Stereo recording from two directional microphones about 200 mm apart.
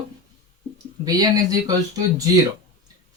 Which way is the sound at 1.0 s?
20° right (ahead or behind).